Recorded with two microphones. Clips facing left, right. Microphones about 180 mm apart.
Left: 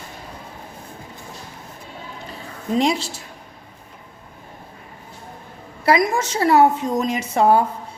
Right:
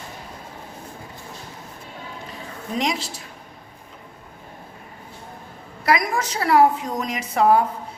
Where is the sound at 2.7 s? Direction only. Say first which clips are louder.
Left 5 dB; 30° left (ahead or behind).